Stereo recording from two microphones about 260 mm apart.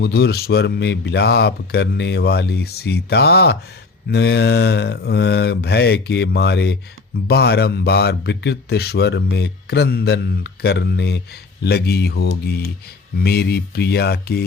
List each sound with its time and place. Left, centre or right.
0.0 s speech: left